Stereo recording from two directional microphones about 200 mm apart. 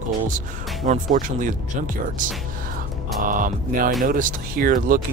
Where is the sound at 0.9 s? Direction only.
40° right (ahead or behind).